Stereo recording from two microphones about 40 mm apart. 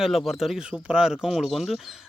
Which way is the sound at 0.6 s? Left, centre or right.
Right.